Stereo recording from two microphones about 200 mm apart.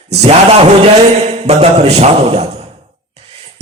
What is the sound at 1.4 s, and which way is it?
A man's voice, 30° right (ahead or behind).